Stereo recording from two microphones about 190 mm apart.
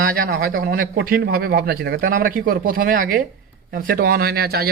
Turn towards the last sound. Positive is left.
turn(degrees=-55)  # may be behind; listen again after turning